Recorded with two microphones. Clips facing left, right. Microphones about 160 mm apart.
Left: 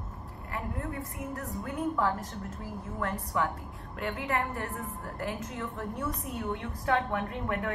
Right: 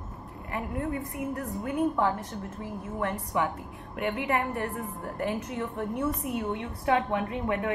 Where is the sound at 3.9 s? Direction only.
25° right (ahead or behind).